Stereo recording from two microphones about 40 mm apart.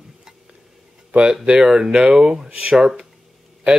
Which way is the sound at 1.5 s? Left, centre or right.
Centre.